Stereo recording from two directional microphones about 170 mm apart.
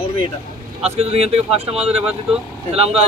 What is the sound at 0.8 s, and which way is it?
Speech, 35° right (ahead or behind).